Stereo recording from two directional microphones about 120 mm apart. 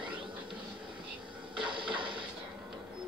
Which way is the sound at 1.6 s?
45° right (ahead or behind).